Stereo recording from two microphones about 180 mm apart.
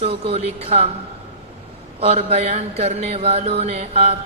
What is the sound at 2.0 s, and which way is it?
Speech, 35° right (ahead or behind).